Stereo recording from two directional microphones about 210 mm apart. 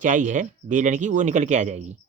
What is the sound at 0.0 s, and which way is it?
Speech, 35° right (ahead or behind).